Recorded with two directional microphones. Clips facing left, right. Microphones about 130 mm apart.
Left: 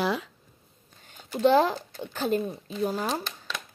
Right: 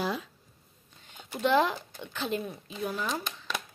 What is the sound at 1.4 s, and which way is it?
Speech, 35° left (ahead or behind).